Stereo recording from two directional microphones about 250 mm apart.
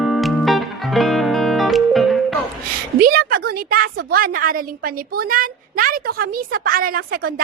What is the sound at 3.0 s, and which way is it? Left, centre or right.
A woman's voice, right.